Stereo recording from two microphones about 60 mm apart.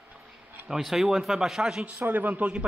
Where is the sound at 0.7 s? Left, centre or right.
Centre.